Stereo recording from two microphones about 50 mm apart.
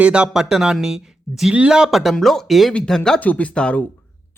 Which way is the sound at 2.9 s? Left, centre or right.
Centre.